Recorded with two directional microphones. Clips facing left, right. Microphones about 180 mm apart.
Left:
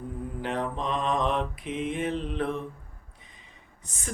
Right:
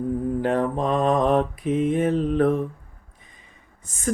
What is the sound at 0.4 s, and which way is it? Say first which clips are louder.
Mantra: right 6 dB; 45° right (ahead or behind).